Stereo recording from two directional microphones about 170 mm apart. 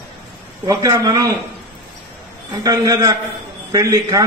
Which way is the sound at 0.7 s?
20° right (ahead or behind).